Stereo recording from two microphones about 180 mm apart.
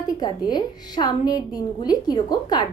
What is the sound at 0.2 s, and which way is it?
A child's voice, 25° left (ahead or behind).